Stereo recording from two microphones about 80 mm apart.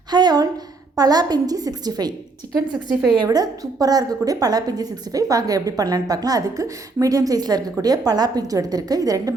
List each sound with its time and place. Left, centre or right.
0.1 s a sound: right
0.9 s a woman's voice: right
3.2 s a woman's voice: right